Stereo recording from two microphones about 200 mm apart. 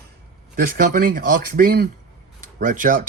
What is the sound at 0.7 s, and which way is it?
Speech, 45° right (ahead or behind).